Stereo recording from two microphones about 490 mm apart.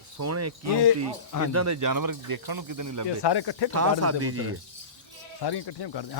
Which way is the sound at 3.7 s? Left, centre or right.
Right.